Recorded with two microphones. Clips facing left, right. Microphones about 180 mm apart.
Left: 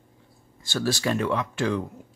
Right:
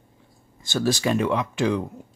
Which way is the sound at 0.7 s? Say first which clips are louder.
Right 3 dB; 15° right (ahead or behind).